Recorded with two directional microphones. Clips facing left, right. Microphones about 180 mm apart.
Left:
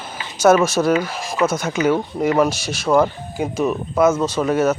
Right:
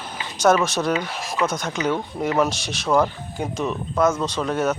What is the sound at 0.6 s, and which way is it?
Speech, 5° left (ahead or behind).